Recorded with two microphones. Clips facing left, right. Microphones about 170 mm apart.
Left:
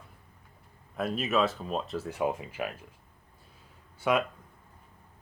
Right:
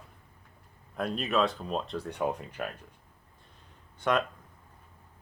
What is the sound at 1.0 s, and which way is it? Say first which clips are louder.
Speech: left 1 dB; 5° left (ahead or behind).